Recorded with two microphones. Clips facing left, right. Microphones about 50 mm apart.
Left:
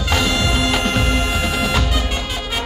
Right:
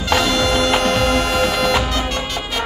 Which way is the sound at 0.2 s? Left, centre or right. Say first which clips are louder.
Right 2 dB; centre.